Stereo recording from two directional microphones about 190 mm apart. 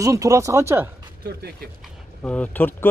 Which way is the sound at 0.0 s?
15° right (ahead or behind).